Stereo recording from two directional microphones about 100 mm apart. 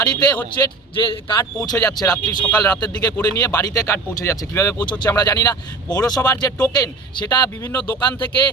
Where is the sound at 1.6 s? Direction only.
40° left (ahead or behind).